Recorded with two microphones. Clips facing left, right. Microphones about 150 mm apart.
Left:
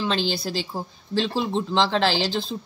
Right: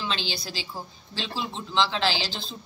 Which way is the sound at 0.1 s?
50° left (ahead or behind).